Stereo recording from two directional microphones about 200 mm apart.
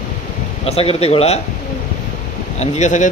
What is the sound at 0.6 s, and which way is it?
Speech, 30° left (ahead or behind).